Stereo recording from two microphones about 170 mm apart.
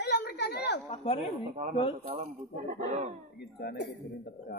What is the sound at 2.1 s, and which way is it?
Speech, 40° right (ahead or behind).